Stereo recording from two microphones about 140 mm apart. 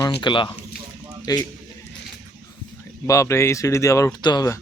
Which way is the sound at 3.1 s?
20° left (ahead or behind).